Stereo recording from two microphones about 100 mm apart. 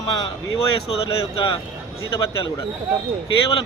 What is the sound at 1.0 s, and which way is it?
Speech, 55° left (ahead or behind).